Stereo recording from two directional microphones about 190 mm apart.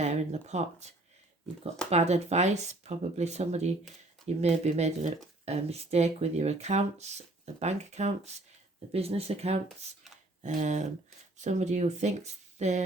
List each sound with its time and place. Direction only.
0.0 s speech: 35° right (ahead or behind)